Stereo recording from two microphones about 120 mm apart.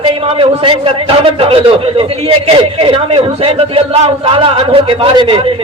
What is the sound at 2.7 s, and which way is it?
A man's voice, 50° right (ahead or behind).